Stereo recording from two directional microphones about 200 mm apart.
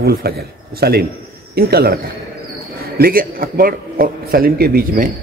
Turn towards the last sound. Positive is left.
turn(degrees=-45)  # may be behind; listen again after turning